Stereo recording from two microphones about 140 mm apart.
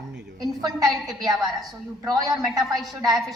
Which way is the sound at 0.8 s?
Centre (ahead or behind).